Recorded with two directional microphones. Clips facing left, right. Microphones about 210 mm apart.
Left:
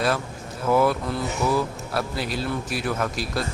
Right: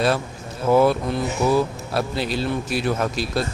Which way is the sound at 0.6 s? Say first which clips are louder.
Right 4 dB; 25° right (ahead or behind).